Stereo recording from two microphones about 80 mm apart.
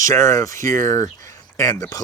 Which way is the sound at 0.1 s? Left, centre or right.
Left.